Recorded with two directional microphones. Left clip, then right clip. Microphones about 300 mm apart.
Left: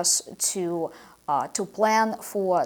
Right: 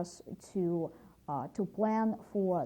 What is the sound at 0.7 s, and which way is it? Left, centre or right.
A woman's voice, centre.